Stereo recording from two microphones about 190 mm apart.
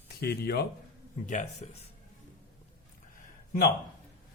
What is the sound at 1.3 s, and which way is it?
Speech, 40° left (ahead or behind).